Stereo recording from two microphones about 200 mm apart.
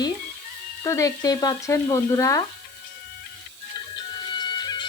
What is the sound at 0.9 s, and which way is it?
Speech, 15° left (ahead or behind).